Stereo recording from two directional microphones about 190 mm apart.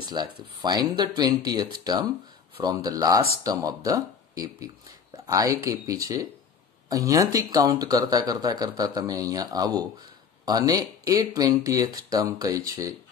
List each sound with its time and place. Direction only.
0.0 s speech: 20° right (ahead or behind)